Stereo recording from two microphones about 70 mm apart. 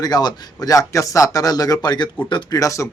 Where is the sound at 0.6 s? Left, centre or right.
Left.